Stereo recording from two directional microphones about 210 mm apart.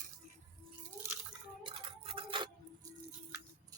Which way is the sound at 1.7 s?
25° right (ahead or behind).